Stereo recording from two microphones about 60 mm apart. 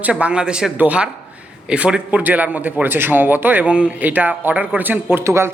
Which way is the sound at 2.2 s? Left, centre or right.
Right.